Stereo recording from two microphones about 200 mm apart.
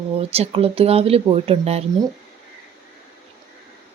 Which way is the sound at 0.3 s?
30° right (ahead or behind).